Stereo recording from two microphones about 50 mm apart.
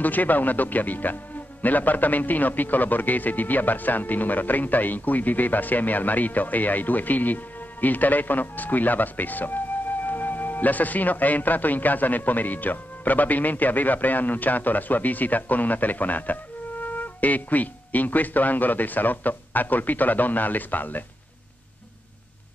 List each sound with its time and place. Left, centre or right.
0.0 s speech: left